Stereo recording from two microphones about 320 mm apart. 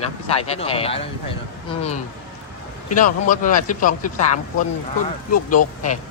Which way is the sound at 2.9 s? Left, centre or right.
Left.